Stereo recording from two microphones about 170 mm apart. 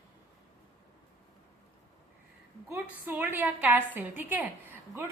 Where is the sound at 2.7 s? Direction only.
10° right (ahead or behind).